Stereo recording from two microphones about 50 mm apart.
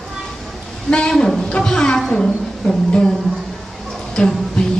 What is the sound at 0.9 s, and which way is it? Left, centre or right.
A woman's voice, centre.